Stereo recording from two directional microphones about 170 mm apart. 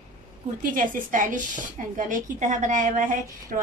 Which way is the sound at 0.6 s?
50° right (ahead or behind).